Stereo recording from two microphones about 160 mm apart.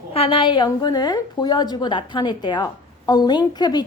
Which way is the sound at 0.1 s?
35° left (ahead or behind).